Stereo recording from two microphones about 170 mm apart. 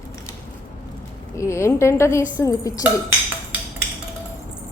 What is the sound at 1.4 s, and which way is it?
A woman's voice, 15° left (ahead or behind).